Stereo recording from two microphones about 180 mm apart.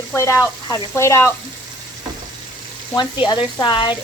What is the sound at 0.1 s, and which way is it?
Speech, 15° left (ahead or behind).